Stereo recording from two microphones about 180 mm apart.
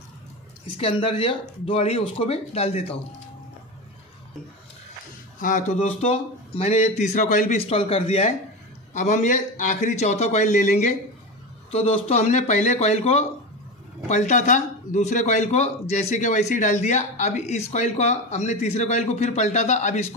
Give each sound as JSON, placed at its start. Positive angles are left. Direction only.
{"t": 0.7, "sound": "speech", "side_deg": 30}
{"t": 5.4, "sound": "speech", "side_deg": 45}